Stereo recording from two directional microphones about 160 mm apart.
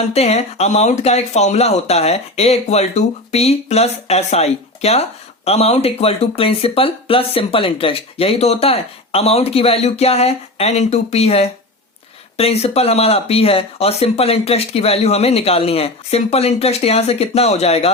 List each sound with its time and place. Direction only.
0.1 s speech: 40° left (ahead or behind)